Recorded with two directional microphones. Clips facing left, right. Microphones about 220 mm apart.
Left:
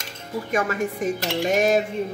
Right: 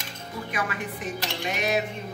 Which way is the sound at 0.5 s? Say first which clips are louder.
Left 9 dB; 45° left (ahead or behind).